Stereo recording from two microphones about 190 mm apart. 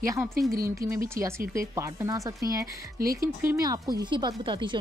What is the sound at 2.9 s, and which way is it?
Speech, 50° right (ahead or behind).